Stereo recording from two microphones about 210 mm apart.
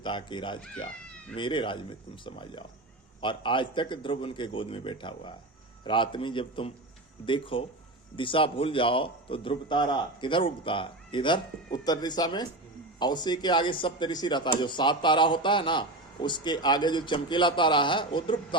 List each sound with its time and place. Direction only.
0.0 s speech: 25° left (ahead or behind)